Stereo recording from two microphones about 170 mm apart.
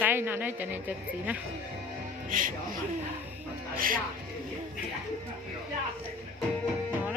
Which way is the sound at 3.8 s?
55° right (ahead or behind).